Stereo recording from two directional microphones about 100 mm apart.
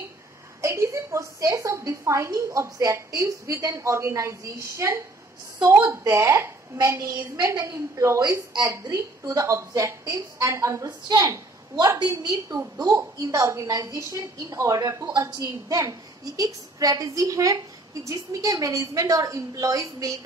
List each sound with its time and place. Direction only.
0.6 s a woman's voice: 30° right (ahead or behind)
12.0 s a woman's voice: 45° right (ahead or behind)